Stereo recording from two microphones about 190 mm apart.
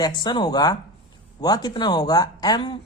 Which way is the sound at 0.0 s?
20° left (ahead or behind).